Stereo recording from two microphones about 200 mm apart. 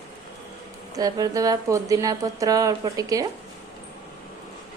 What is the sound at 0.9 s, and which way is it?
A woman's voice, 20° right (ahead or behind).